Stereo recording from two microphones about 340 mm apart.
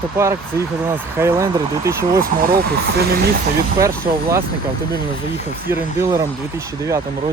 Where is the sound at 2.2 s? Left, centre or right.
Right.